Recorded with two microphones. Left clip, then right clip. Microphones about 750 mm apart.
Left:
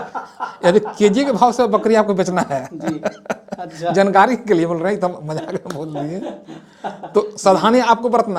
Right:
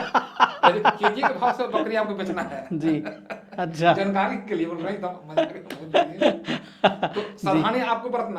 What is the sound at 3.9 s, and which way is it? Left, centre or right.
Speech, left.